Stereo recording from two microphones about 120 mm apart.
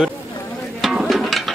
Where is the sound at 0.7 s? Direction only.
Centre (ahead or behind).